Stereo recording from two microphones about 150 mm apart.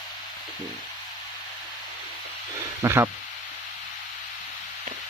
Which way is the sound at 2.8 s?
15° right (ahead or behind).